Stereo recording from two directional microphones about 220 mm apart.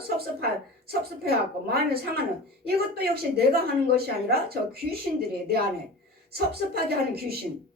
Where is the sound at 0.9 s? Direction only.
45° right (ahead or behind).